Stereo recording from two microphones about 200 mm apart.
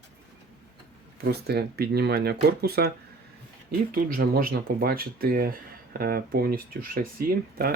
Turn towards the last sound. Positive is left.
turn(degrees=-50)  # may be behind; listen again after turning